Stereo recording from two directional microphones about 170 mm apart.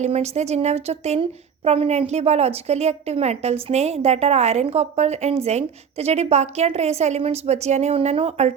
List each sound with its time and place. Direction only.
0.0 s a woman's voice: 40° right (ahead or behind)